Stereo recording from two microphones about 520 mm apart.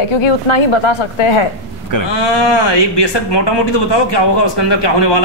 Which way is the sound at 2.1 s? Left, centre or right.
Left.